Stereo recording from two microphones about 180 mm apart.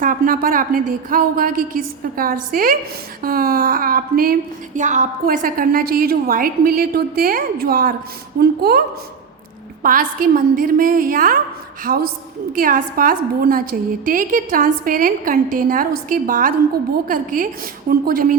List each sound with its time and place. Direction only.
0.0 s a woman's voice: 50° right (ahead or behind)
9.8 s a woman's voice: 50° right (ahead or behind)